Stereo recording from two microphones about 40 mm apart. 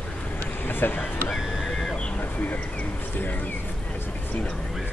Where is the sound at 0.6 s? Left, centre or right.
Left.